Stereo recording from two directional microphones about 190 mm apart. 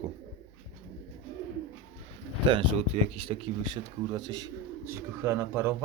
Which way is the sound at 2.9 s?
30° right (ahead or behind).